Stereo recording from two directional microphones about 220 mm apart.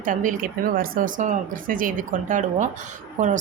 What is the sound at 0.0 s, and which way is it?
Speech, 35° right (ahead or behind).